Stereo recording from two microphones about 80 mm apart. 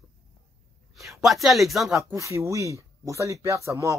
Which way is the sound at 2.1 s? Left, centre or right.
Right.